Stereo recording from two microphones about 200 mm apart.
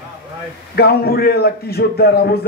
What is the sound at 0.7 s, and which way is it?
A man's voice, 50° left (ahead or behind).